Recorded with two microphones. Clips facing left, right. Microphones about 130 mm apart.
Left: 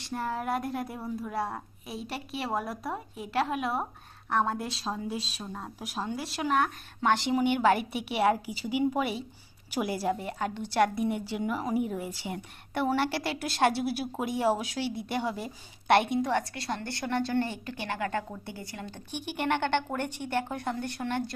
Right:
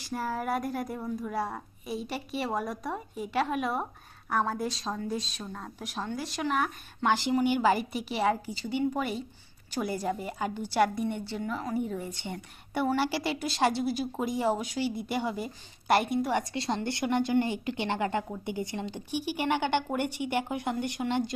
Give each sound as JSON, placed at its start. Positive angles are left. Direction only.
{"t": 0.0, "sound": "a woman's voice", "side_deg": 0}
{"t": 16.3, "sound": "a woman's voice", "side_deg": -20}
{"t": 19.2, "sound": "speech", "side_deg": -5}